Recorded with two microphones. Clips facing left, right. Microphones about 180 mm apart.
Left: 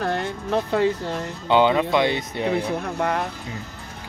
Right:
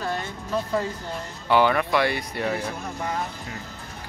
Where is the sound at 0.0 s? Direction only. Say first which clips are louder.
Left 5 dB; 65° left (ahead or behind).